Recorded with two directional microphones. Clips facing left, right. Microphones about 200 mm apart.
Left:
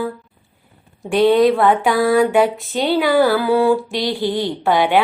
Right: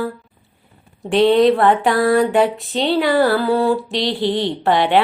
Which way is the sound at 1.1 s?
Centre (ahead or behind).